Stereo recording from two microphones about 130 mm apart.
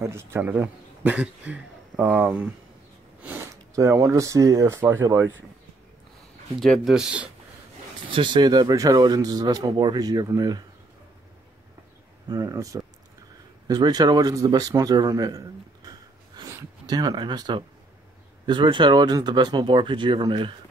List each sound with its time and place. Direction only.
0.0 s a man's voice: 20° right (ahead or behind)
3.2 s a sound: 15° right (ahead or behind)
3.7 s speech: 25° right (ahead or behind)
6.6 s speech: centre (ahead or behind)
8.1 s speech: 35° right (ahead or behind)
12.3 s a man's voice: 30° right (ahead or behind)